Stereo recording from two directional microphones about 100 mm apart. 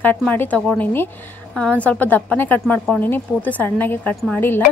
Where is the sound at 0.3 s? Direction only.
15° left (ahead or behind).